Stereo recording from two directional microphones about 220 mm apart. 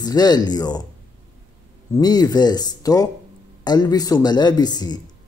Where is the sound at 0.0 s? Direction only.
15° left (ahead or behind).